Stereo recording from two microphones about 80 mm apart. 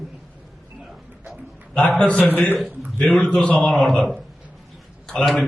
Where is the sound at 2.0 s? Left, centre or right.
Centre.